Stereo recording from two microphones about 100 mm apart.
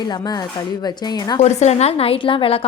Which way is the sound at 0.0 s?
45° left (ahead or behind).